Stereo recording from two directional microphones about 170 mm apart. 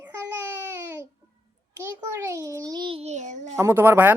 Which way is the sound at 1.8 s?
15° right (ahead or behind).